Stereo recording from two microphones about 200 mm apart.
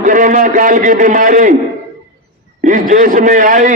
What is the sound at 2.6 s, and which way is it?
A man's voice, 40° right (ahead or behind).